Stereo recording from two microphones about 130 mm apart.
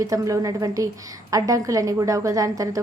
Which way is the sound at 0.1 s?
25° right (ahead or behind).